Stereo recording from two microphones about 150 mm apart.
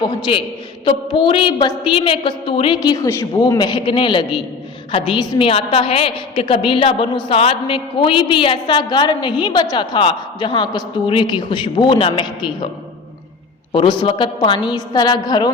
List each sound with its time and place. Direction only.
0.0 s a woman's voice: 35° left (ahead or behind)
2.8 s a woman's voice: 25° left (ahead or behind)
13.7 s a woman's voice: 30° left (ahead or behind)